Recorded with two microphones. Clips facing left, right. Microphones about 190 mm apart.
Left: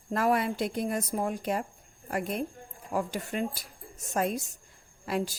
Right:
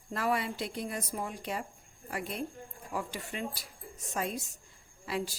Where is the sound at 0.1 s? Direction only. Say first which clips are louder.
Left 5 dB; 50° left (ahead or behind).